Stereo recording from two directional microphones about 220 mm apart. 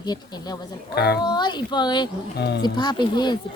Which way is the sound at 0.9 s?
45° left (ahead or behind).